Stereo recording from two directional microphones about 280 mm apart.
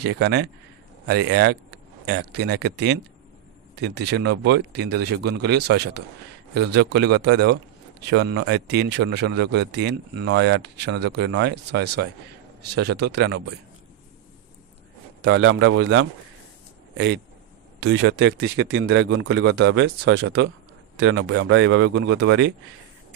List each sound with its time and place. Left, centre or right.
0.0 s speech: right
15.2 s a man's voice: right